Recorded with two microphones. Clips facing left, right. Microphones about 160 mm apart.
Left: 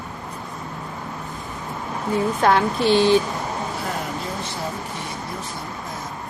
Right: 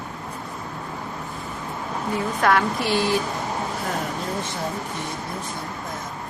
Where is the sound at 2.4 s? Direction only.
25° left (ahead or behind).